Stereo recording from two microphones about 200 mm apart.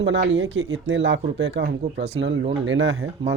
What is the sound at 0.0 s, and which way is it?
Speech, 65° right (ahead or behind).